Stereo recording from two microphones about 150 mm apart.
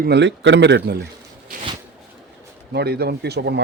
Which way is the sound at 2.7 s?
90° right.